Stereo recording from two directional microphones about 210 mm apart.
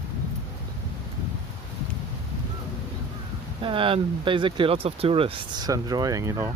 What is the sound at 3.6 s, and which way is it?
Speech, 25° right (ahead or behind).